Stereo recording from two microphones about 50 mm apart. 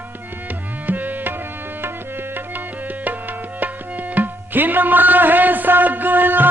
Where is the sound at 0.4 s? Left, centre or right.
Right.